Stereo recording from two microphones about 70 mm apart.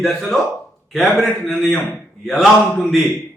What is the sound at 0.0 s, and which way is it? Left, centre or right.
A man's voice, centre.